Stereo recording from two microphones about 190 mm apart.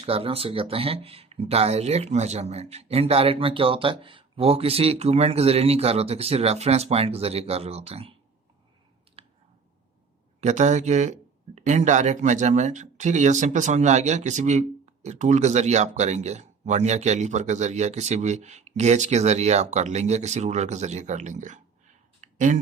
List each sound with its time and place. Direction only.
0.0 s speech: 30° right (ahead or behind)
9.2 s clicking: 30° right (ahead or behind)
10.4 s speech: 40° right (ahead or behind)
22.2 s a sound: 40° right (ahead or behind)